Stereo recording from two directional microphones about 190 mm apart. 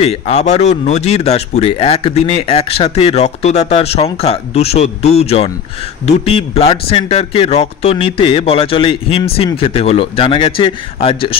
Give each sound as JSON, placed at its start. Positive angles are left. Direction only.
{"t": 0.0, "sound": "speech", "side_deg": 35}